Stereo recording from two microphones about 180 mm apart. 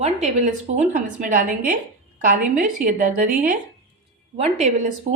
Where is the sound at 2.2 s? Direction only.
50° right (ahead or behind).